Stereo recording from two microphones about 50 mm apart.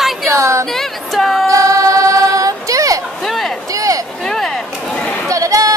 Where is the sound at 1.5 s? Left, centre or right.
Right.